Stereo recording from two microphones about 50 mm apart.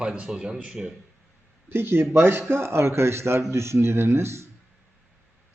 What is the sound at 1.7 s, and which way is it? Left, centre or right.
Speech, right.